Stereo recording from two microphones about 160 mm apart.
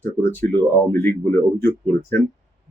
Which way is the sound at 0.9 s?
10° left (ahead or behind).